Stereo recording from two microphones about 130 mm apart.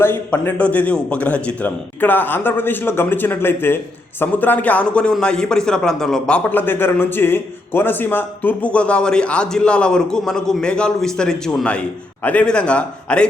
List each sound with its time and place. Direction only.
0.0 s a man's voice: 15° left (ahead or behind)